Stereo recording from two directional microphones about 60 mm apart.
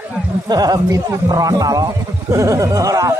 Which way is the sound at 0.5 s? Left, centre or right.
Right.